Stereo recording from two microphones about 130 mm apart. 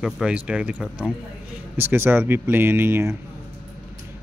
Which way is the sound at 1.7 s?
20° right (ahead or behind).